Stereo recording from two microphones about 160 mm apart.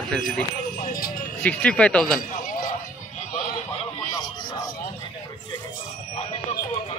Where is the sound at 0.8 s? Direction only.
65° left (ahead or behind).